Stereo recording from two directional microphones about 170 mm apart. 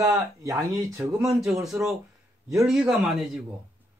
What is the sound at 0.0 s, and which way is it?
Speech, 20° right (ahead or behind).